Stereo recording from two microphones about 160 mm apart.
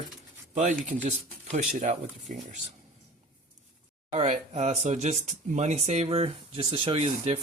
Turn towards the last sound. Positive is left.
turn(degrees=-35)  # may be behind; listen again after turning